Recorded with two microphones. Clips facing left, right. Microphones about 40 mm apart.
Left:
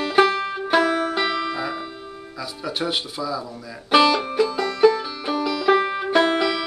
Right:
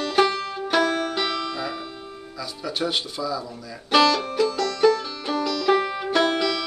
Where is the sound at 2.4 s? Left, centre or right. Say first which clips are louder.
Even; centre.